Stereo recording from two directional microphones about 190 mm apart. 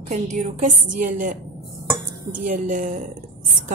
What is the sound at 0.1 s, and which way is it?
A woman's voice, 40° right (ahead or behind).